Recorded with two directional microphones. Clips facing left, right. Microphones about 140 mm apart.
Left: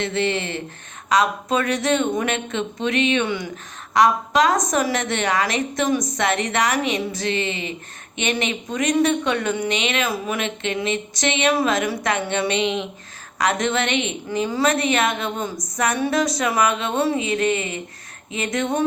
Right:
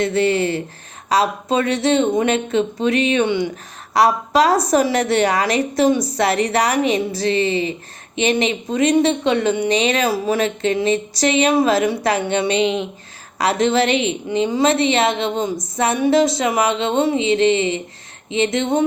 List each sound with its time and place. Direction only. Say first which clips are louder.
0.0 s a woman's voice: right 6 dB; 40° right (ahead or behind)